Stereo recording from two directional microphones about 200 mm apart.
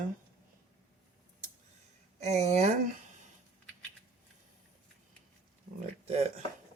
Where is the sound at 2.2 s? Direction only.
35° right (ahead or behind).